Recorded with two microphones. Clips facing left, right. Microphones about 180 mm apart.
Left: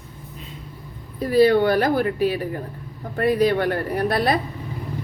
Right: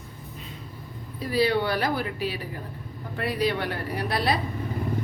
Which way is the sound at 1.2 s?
50° left (ahead or behind).